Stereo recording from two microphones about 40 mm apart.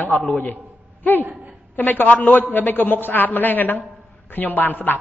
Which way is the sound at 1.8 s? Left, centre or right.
Left.